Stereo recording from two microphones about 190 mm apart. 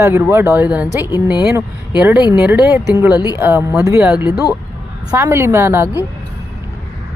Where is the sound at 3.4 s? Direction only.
10° right (ahead or behind).